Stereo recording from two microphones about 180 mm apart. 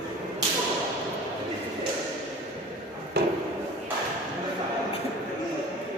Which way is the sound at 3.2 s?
65° right (ahead or behind).